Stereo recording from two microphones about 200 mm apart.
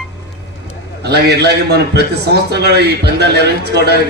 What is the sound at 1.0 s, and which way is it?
A man's voice, 55° right (ahead or behind).